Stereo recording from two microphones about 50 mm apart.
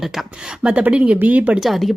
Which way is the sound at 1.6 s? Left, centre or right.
Centre.